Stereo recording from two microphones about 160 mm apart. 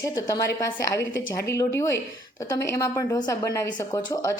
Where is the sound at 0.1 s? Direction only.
20° left (ahead or behind).